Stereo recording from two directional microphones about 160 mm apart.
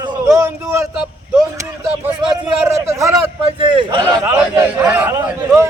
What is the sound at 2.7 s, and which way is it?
Speech, 20° right (ahead or behind).